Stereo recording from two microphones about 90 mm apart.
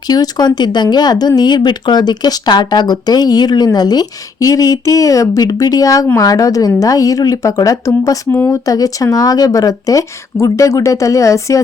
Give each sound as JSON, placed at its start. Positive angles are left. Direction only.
{"t": 0.1, "sound": "speech", "side_deg": 50}